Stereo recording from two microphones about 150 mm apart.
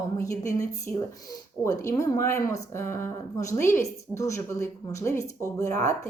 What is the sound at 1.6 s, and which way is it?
Speech, 20° left (ahead or behind).